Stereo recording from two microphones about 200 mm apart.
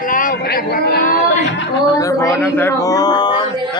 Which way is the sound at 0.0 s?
45° left (ahead or behind).